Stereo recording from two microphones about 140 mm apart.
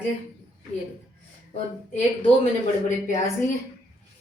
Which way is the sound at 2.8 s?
60° left (ahead or behind).